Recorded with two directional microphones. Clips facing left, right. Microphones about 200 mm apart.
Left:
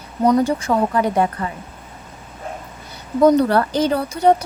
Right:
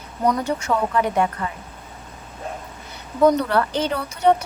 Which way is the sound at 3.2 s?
35° left (ahead or behind).